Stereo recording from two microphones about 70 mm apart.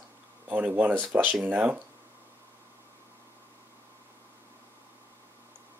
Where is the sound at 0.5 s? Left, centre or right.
Right.